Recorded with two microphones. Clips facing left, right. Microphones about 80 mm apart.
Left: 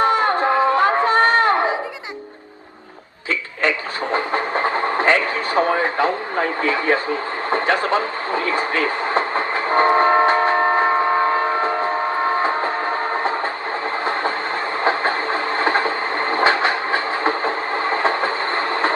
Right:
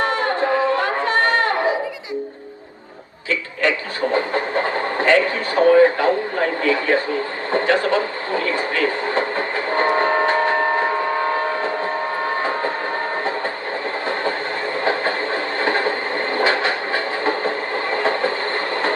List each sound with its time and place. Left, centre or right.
0.0 s a sound: left
3.6 s vehicle: left
6.6 s radio: left
12.4 s train: left
14.0 s train: left